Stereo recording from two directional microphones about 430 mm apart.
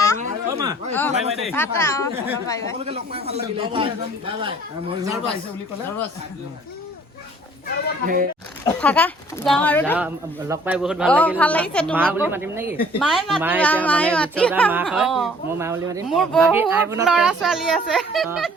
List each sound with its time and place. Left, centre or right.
0.2 s a sound: centre
0.9 s speech: centre
2.8 s a man's voice: centre
8.0 s speech: centre
8.8 s speech: centre